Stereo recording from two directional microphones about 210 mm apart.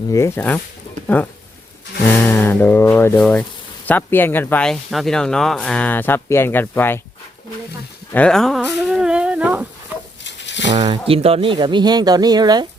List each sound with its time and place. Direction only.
0.1 s speech: 15° left (ahead or behind)
8.1 s speech: 5° left (ahead or behind)
10.2 s a sound: 60° left (ahead or behind)
10.7 s speech: 30° right (ahead or behind)